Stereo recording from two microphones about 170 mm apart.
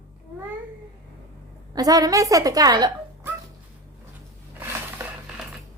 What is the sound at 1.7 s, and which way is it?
A woman's voice, 20° right (ahead or behind).